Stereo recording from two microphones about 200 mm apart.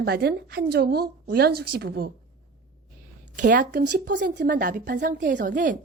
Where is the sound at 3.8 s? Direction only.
55° right (ahead or behind).